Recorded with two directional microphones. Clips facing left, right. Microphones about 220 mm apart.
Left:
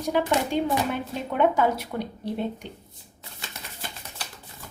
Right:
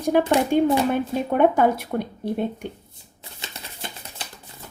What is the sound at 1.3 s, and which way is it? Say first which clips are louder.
Speech: right 3 dB; 50° right (ahead or behind).